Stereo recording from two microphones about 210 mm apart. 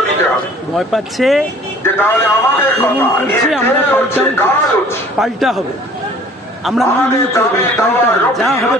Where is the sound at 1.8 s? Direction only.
10° left (ahead or behind).